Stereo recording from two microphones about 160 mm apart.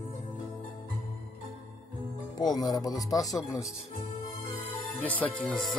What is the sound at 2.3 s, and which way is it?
Speech, 25° left (ahead or behind).